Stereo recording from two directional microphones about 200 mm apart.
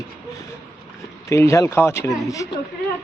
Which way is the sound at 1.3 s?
15° left (ahead or behind).